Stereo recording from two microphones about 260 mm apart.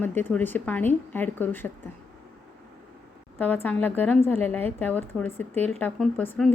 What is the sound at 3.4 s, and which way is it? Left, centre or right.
A woman's voice, centre.